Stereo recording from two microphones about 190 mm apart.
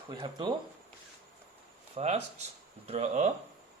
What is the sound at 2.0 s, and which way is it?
Speech, 35° right (ahead or behind).